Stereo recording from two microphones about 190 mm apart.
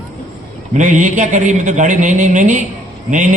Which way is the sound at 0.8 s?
40° right (ahead or behind).